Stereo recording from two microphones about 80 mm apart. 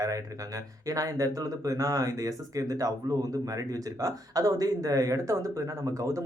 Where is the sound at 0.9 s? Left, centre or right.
Right.